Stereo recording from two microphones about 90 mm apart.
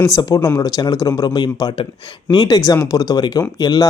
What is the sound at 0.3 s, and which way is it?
Speech, 40° left (ahead or behind).